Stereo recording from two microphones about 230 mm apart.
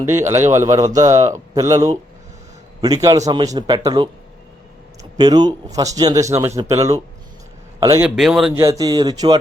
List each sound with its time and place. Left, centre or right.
0.1 s a man's voice: centre
5.1 s a man's voice: centre
8.6 s a man's voice: centre